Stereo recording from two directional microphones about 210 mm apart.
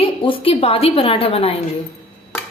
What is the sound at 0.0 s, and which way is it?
A woman's voice, 25° left (ahead or behind).